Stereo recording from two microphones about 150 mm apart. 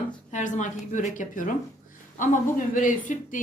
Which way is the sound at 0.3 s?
55° left (ahead or behind).